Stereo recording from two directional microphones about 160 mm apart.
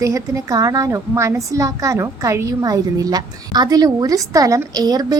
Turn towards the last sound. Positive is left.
turn(degrees=-25)  # may be behind; listen again after turning